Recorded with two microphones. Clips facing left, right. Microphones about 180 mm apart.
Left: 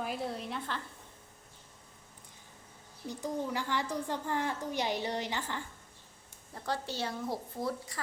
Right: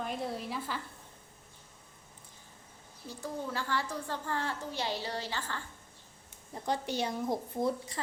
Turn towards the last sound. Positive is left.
turn(degrees=-20)  # may be behind; listen again after turning